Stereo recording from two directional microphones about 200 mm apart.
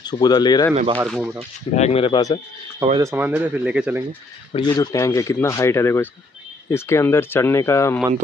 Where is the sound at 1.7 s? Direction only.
30° left (ahead or behind).